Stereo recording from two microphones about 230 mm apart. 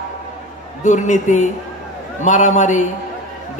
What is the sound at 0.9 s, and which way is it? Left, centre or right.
A man's voice, left.